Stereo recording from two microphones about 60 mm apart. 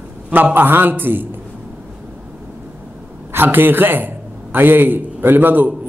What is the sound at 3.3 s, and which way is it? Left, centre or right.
A man's voice, right.